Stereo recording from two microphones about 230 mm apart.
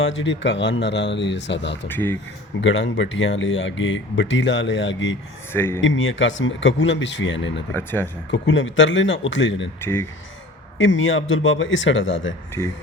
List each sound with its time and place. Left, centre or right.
0.0 s speech: left
1.9 s speech: centre
2.6 s speech: left
5.5 s speech: centre
5.8 s speech: left
7.7 s speech: centre
8.3 s speech: left
9.8 s speech: centre
10.8 s speech: left